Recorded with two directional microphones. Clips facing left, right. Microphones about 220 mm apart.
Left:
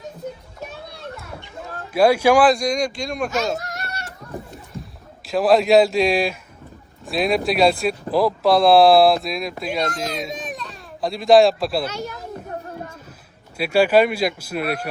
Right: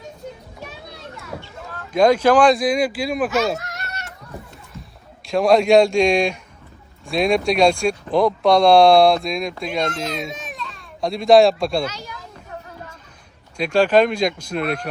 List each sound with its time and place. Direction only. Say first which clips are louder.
1.9 s speech: right 1 dB; 10° left (ahead or behind)
4.7 s a child's voice: left 4 dB; centre (ahead or behind)
11.9 s speech: left 5 dB; 50° left (ahead or behind)
13.6 s speech: even; 10° left (ahead or behind)